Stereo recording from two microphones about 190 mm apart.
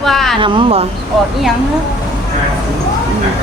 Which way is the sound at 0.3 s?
25° right (ahead or behind).